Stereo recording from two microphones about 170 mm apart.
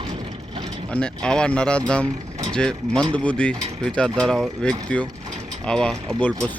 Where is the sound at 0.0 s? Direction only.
30° right (ahead or behind).